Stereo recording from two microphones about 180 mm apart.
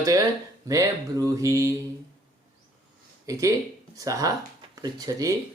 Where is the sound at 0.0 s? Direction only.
20° right (ahead or behind).